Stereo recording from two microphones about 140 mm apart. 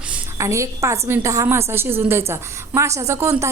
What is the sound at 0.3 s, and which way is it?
A woman's voice, 20° right (ahead or behind).